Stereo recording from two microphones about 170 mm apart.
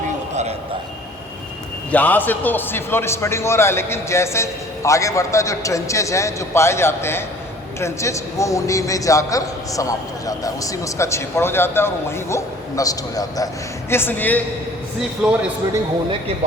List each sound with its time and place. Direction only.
1.9 s a man's voice: 10° left (ahead or behind)
15.2 s a man's voice: 5° right (ahead or behind)